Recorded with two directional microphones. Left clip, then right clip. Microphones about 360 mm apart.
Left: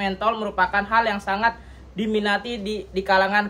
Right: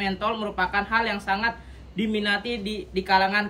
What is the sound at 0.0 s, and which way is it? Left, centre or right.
A woman's voice, centre.